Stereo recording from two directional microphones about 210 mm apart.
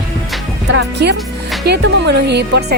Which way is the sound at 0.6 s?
60° right (ahead or behind).